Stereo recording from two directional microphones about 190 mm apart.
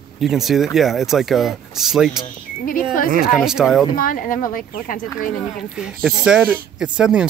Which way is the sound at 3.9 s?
45° left (ahead or behind).